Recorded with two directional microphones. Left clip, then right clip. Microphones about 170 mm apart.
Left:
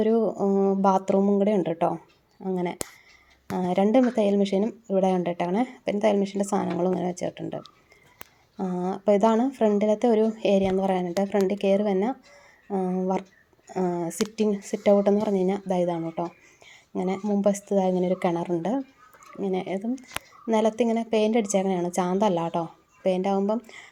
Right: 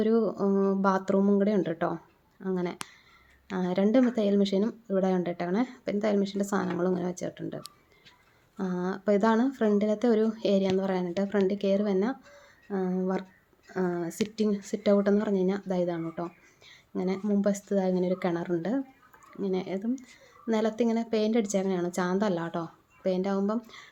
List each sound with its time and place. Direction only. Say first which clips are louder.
0.0 s a woman's voice: left 3 dB; 5° left (ahead or behind)
0.3 s speech: left 3 dB; 20° right (ahead or behind)
0.8 s a woman's voice: left 4 dB; 5° left (ahead or behind)
8.5 s a woman's voice: left 3 dB; centre (ahead or behind)